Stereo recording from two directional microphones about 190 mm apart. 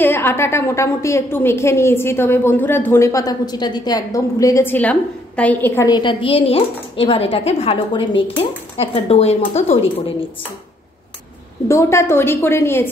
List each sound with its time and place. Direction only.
0.0 s a woman's voice: 10° left (ahead or behind)
5.9 s a woman's voice: 25° left (ahead or behind)
11.6 s a woman's voice: 15° left (ahead or behind)